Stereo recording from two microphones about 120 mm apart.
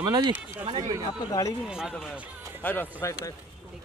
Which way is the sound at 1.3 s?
30° left (ahead or behind).